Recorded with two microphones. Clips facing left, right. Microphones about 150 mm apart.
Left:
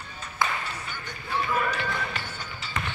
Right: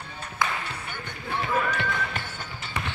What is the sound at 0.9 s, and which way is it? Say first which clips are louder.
Basketball bounce: right 1 dB; 55° right (ahead or behind).